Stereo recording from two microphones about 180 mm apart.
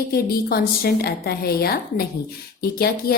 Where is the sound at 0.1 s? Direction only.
60° left (ahead or behind).